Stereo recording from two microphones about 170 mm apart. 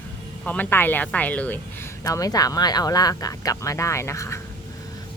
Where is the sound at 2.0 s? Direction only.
20° left (ahead or behind).